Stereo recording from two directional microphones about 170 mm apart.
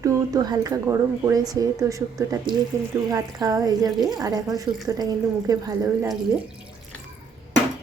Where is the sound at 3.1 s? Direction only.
20° right (ahead or behind).